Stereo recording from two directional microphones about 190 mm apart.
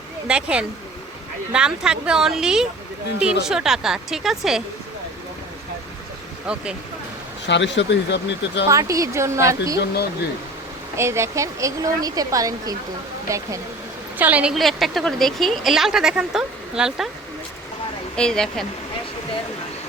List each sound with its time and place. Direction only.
0.3 s a woman's voice: 5° right (ahead or behind)
7.4 s speech: 70° left (ahead or behind)
8.6 s speech: 15° right (ahead or behind)
10.9 s a woman's voice: 15° right (ahead or behind)
18.2 s a woman's voice: 5° left (ahead or behind)